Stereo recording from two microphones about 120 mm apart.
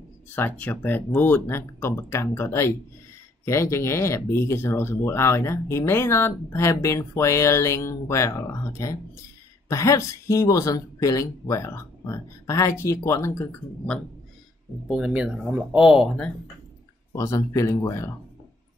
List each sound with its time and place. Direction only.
0.3 s speech: 15° left (ahead or behind)
14.9 s speech: 10° right (ahead or behind)
17.1 s speech: 25° left (ahead or behind)